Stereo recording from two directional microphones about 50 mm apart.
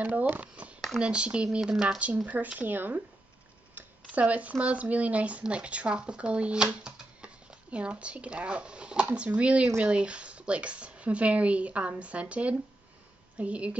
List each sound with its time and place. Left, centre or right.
0.0 s speech: right
0.7 s a sound: centre
1.0 s speech: right
2.0 s speech: right
4.0 s speech: right